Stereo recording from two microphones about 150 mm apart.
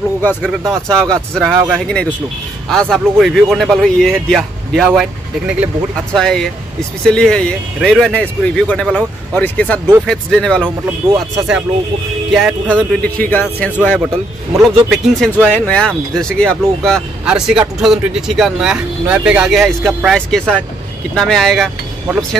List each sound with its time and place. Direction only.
0.2 s speech: 10° left (ahead or behind)
6.1 s speech: 5° left (ahead or behind)
11.0 s speech: 40° right (ahead or behind)
12.3 s speech: 5° right (ahead or behind)
12.7 s speech: 10° left (ahead or behind)
14.6 s speech: centre (ahead or behind)
17.2 s speech: 5° right (ahead or behind)